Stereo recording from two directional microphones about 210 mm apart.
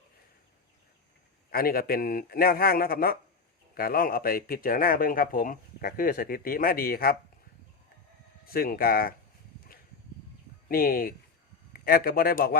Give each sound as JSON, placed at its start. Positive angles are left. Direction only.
{"t": 1.5, "sound": "speech", "side_deg": 45}
{"t": 8.5, "sound": "speech", "side_deg": 45}
{"t": 10.7, "sound": "speech", "side_deg": 45}